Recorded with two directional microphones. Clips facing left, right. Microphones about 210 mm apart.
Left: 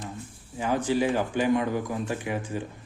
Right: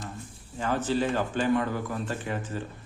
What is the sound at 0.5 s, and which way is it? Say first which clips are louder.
Speech: left 2 dB; 15° left (ahead or behind).